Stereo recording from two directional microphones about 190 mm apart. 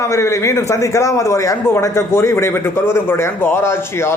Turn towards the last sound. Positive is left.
turn(degrees=15)  # may be behind; listen again after turning